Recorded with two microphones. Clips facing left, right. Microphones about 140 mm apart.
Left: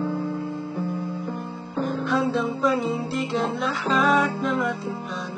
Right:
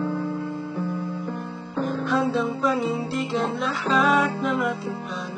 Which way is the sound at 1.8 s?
Centre (ahead or behind).